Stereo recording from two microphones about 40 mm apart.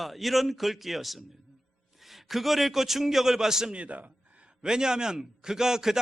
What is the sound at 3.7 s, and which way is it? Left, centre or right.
Speech, right.